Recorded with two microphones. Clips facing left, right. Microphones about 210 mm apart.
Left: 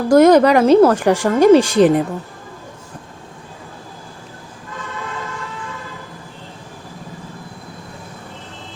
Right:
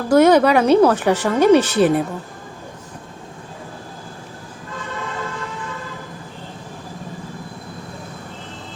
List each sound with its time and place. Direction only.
0.1 s speech: 10° left (ahead or behind)